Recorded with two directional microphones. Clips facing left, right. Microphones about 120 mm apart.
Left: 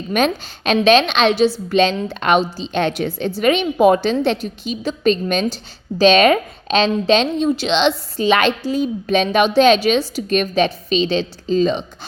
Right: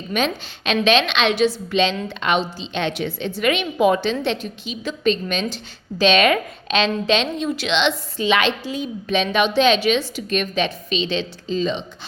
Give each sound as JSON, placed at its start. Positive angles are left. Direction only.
{"t": 0.1, "sound": "a woman's voice", "side_deg": 45}
{"t": 1.7, "sound": "a woman's voice", "side_deg": 45}